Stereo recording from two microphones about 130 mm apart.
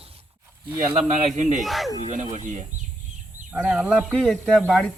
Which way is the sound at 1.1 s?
65° right (ahead or behind).